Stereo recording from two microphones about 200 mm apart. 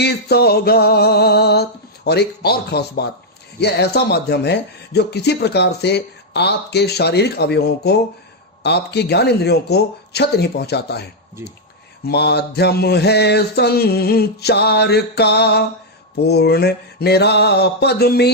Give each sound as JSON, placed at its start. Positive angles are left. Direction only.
{"t": 0.0, "sound": "music", "side_deg": 55}
{"t": 3.6, "sound": "speech", "side_deg": 55}
{"t": 12.0, "sound": "speech", "side_deg": 55}